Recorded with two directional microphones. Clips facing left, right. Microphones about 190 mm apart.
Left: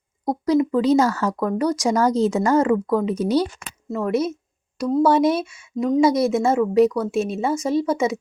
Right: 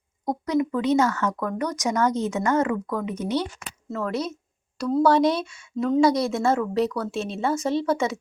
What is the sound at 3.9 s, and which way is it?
A woman's voice, 20° left (ahead or behind).